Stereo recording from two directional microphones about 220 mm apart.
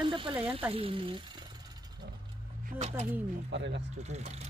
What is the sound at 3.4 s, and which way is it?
Speech, 55° right (ahead or behind).